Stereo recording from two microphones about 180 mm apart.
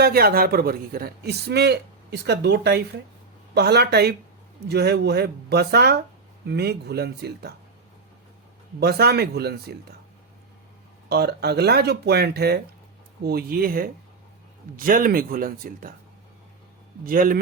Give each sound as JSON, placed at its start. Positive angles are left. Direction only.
{"t": 0.0, "sound": "a man's voice", "side_deg": -60}
{"t": 8.8, "sound": "a man's voice", "side_deg": -60}
{"t": 11.1, "sound": "a man's voice", "side_deg": -60}
{"t": 17.1, "sound": "speech", "side_deg": -50}